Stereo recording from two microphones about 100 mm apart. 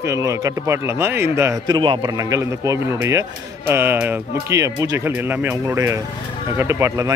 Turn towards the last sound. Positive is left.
turn(degrees=-30)  # may be behind; listen again after turning